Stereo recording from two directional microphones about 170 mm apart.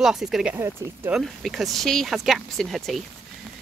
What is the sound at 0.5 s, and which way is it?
Speech, 15° right (ahead or behind).